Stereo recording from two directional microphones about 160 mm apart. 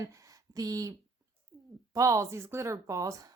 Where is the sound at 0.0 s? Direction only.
20° right (ahead or behind).